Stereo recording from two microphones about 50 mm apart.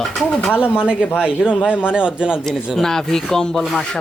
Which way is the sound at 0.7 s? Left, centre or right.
Centre.